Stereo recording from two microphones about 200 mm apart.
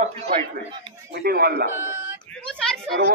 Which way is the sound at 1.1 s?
50° right (ahead or behind).